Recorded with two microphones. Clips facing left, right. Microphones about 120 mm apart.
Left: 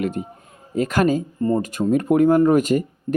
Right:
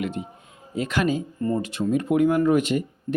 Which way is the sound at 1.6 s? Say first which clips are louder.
Left 4 dB; 45° left (ahead or behind).